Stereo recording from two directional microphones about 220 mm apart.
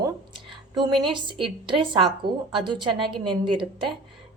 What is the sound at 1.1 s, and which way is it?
Speech, 20° right (ahead or behind).